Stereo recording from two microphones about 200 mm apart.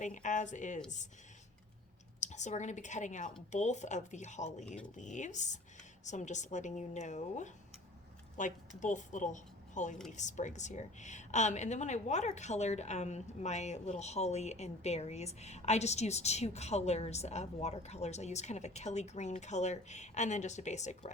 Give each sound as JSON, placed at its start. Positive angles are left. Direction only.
{"t": 0.0, "sound": "a woman's voice", "side_deg": 40}
{"t": 2.2, "sound": "a woman's voice", "side_deg": 35}